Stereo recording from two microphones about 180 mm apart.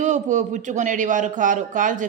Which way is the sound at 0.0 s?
45° right (ahead or behind).